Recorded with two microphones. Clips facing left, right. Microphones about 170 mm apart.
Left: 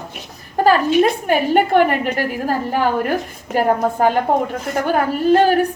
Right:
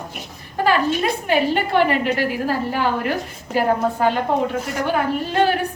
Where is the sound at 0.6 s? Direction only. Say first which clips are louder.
Left 5 dB; 45° left (ahead or behind).